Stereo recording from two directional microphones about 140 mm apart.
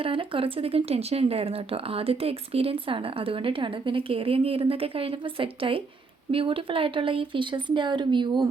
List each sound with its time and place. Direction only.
0.0 s speech: 40° right (ahead or behind)